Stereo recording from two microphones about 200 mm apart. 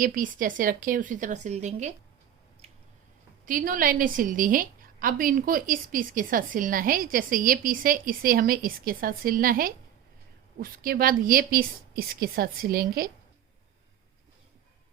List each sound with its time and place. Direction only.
0.0 s a woman's voice: 45° right (ahead or behind)
2.6 s squish: 30° right (ahead or behind)
3.4 s a woman's voice: 45° right (ahead or behind)